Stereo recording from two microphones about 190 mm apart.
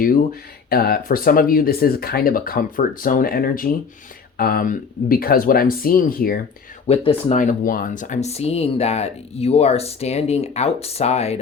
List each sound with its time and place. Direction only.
0.0 s speech: 45° left (ahead or behind)
6.8 s speech: 30° left (ahead or behind)
7.3 s speech: 45° left (ahead or behind)